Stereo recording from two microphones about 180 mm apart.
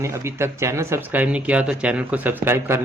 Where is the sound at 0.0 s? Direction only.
15° right (ahead or behind).